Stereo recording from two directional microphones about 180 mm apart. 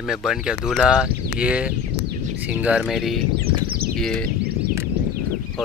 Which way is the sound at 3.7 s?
55° right (ahead or behind).